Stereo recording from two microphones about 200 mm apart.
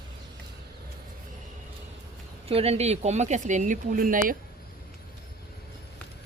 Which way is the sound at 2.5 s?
30° right (ahead or behind).